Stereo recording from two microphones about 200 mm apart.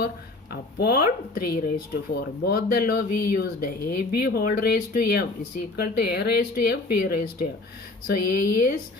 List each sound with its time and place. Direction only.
0.5 s speech: 50° left (ahead or behind)